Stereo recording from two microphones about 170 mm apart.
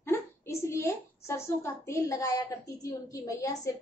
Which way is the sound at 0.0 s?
15° left (ahead or behind).